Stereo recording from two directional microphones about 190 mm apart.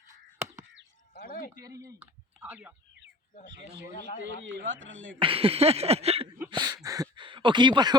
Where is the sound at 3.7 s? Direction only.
65° right (ahead or behind).